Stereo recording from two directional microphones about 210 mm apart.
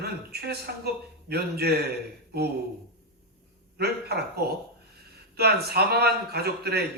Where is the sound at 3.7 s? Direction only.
50° right (ahead or behind).